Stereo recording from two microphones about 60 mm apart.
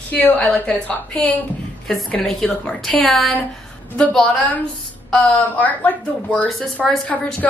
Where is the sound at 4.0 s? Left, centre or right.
Centre.